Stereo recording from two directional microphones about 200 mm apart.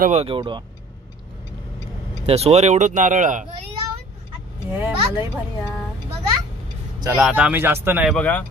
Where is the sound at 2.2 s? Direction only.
30° right (ahead or behind).